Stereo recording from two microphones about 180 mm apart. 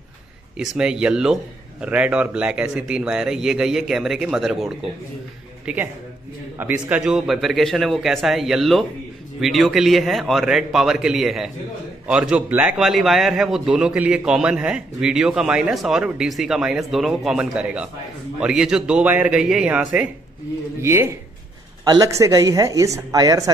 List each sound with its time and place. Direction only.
0.6 s a man's voice: 5° right (ahead or behind); by 23.5 s 20° right (ahead or behind)